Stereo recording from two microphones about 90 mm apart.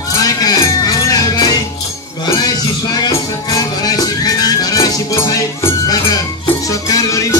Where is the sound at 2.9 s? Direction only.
45° left (ahead or behind).